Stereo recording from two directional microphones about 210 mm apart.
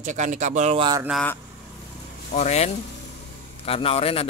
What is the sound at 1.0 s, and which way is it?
Speech, centre (ahead or behind).